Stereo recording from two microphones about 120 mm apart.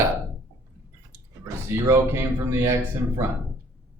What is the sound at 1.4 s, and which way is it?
Speech, 25° right (ahead or behind).